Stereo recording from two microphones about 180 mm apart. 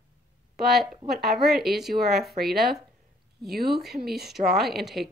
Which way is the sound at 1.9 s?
60° right (ahead or behind).